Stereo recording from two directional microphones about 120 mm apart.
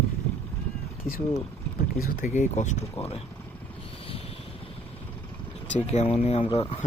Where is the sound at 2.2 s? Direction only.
85° left.